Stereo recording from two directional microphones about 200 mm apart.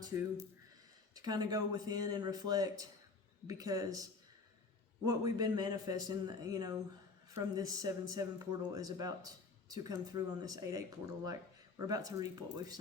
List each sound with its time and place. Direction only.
0.0 s speech: 15° right (ahead or behind)